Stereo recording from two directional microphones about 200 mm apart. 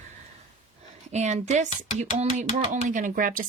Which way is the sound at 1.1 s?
35° right (ahead or behind).